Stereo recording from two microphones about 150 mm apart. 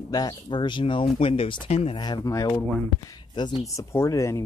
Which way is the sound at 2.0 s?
25° left (ahead or behind).